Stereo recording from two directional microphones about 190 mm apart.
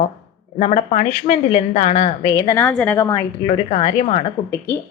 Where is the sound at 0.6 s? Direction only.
35° left (ahead or behind).